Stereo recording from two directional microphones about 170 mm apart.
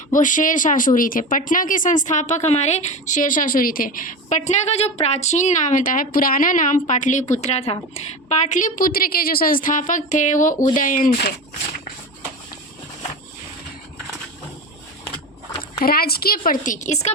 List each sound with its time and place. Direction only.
0.1 s speech: 50° left (ahead or behind)
15.8 s speech: 60° left (ahead or behind); by 17.1 s 45° left (ahead or behind)